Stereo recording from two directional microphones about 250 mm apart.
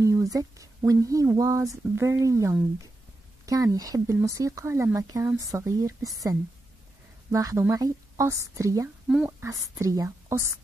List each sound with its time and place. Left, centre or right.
0.0 s speech: centre